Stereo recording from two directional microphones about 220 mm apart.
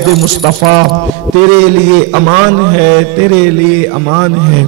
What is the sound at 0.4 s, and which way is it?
Speech, 30° right (ahead or behind).